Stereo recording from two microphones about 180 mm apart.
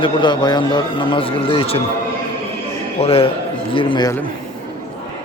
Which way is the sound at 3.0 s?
30° left (ahead or behind).